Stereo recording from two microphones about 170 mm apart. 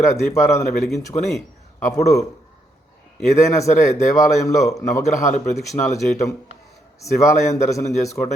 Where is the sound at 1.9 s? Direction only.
20° left (ahead or behind).